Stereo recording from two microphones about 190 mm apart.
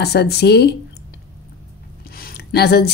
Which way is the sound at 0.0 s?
60° left (ahead or behind).